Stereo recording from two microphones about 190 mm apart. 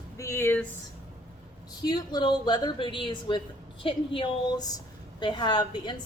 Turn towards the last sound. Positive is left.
turn(degrees=25)  # may be behind; listen again after turning